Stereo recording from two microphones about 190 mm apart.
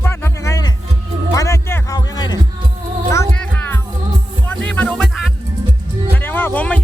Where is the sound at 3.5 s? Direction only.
10° left (ahead or behind).